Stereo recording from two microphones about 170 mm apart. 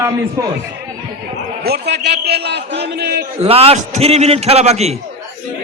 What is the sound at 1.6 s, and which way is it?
A man's voice, 75° right (ahead or behind).